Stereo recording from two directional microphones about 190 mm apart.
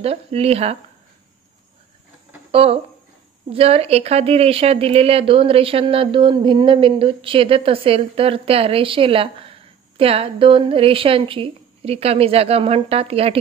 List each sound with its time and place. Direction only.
0.0 s speech: 30° right (ahead or behind)
2.5 s a woman's voice: 30° right (ahead or behind)